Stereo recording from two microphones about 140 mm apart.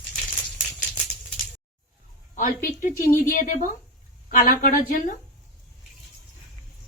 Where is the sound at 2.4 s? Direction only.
75° left (ahead or behind).